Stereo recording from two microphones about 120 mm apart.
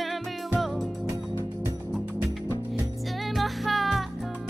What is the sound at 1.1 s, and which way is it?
Music, 25° left (ahead or behind).